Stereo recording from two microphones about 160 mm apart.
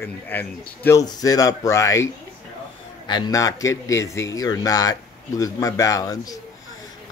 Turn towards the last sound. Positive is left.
turn(degrees=20)  # may be behind; listen again after turning